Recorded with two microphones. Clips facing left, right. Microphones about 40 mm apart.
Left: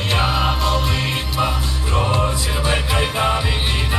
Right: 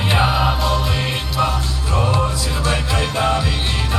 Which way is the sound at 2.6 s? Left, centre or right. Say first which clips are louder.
Left 1 dB; centre.